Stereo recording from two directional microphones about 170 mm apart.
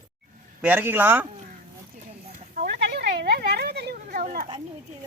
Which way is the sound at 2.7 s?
70° right (ahead or behind).